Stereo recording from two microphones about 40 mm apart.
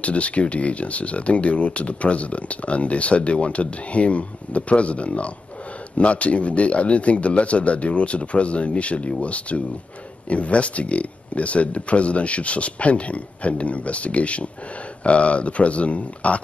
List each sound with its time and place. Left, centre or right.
0.0 s speech: left